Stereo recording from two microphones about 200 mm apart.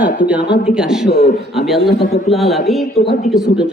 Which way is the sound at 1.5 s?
Centre (ahead or behind).